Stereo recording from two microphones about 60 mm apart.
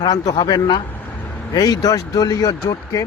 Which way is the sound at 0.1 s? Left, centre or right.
Left.